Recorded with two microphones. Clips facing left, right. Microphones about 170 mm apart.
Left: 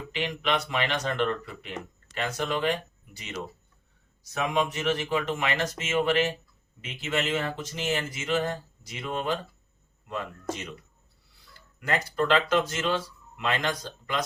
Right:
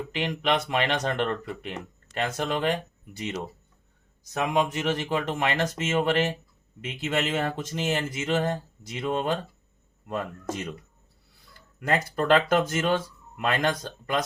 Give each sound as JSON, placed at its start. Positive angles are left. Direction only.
{"t": 0.1, "sound": "speech", "side_deg": -45}
{"t": 4.5, "sound": "speech", "side_deg": -45}
{"t": 12.3, "sound": "speech", "side_deg": -50}